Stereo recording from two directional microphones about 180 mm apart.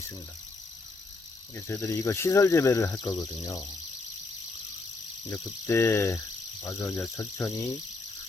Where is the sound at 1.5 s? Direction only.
15° left (ahead or behind).